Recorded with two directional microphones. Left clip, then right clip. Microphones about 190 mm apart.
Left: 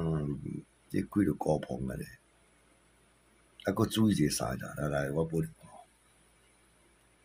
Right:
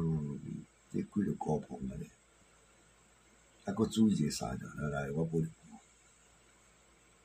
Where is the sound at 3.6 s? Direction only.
55° left (ahead or behind).